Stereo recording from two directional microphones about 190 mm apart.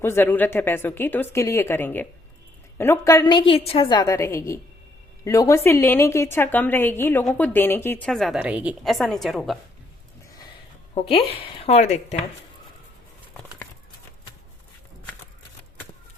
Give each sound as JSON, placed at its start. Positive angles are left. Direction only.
{"t": 0.0, "sound": "a woman's voice", "side_deg": 10}
{"t": 10.9, "sound": "a woman's voice", "side_deg": 30}